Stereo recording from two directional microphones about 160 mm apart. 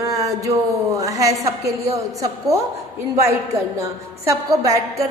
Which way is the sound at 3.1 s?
20° right (ahead or behind).